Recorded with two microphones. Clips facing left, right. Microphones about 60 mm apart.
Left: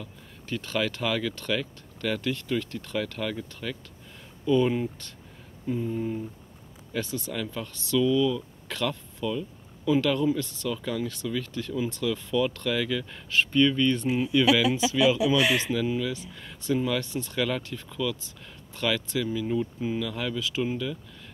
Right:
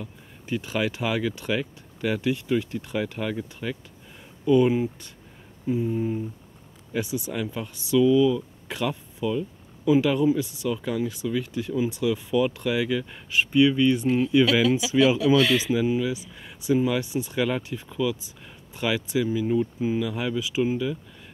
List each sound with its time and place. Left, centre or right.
0.0 s speech: centre
14.0 s speech: centre
15.5 s speech: centre